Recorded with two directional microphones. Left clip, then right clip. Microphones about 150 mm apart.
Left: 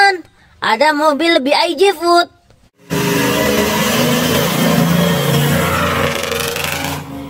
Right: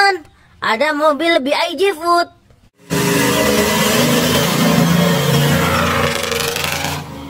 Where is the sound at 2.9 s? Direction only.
Centre (ahead or behind).